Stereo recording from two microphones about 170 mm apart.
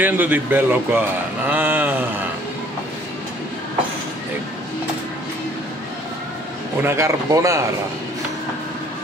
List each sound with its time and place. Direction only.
0.0 s speech: 10° right (ahead or behind)
6.8 s speech: 15° right (ahead or behind)